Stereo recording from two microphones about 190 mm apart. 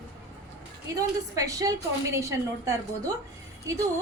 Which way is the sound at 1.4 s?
20° right (ahead or behind).